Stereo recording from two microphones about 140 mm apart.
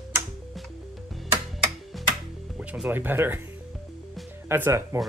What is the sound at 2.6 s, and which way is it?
Speech, 10° right (ahead or behind).